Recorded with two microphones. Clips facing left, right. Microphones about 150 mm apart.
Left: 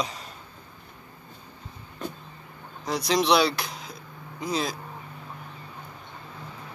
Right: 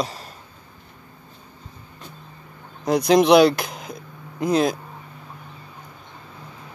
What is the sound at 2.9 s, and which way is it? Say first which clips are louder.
Speech: right 8 dB; 50° right (ahead or behind).